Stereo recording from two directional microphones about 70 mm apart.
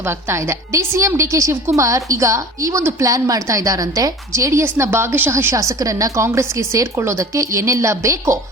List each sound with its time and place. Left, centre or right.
0.0 s speech: right